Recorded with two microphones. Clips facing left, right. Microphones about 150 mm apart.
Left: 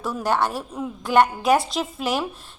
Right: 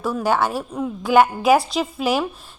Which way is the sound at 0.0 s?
Centre (ahead or behind).